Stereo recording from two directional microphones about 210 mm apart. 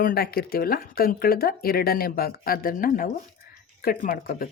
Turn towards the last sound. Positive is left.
turn(degrees=40)  # may be behind; listen again after turning